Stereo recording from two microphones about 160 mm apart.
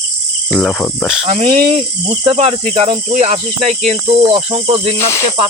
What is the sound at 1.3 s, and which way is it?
Speech, 40° right (ahead or behind).